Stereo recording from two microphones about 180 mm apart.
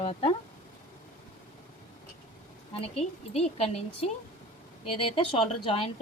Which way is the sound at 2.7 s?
35° left (ahead or behind).